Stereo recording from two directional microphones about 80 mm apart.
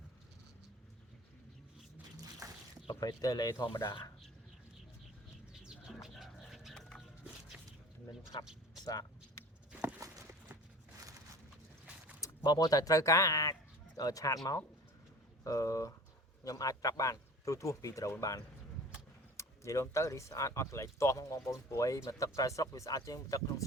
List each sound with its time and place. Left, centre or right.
2.4 s a sound: right
3.0 s speech: left
5.6 s bird: centre
8.8 s speech: left
10.0 s walk: right
12.4 s speech: left